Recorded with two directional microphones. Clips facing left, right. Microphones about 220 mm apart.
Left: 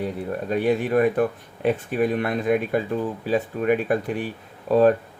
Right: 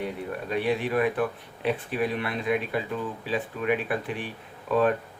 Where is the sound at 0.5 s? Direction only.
45° left (ahead or behind).